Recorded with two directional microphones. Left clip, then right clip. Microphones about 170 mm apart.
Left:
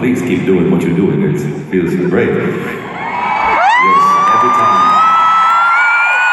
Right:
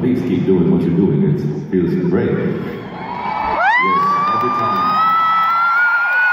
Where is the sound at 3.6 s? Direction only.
10° left (ahead or behind).